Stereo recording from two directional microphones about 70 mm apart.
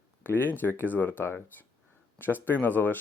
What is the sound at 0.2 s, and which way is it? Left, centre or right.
Speech, left.